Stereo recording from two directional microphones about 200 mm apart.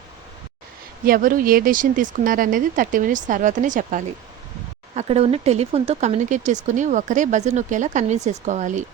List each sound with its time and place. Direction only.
1.0 s speech: 45° right (ahead or behind)